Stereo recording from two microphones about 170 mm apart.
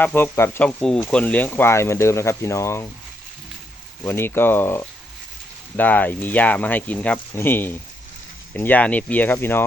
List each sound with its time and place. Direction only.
0.0 s speech: 10° left (ahead or behind)
4.0 s speech: 15° left (ahead or behind)